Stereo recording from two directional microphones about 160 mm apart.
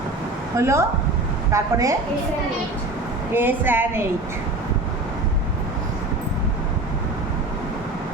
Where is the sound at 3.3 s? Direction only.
10° right (ahead or behind).